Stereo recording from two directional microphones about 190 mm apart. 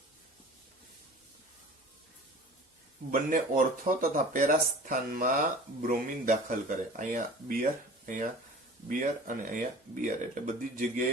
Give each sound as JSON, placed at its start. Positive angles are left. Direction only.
{"t": 3.1, "sound": "speech", "side_deg": -45}